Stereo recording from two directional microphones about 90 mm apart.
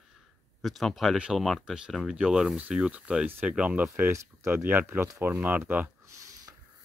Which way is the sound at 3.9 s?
30° right (ahead or behind).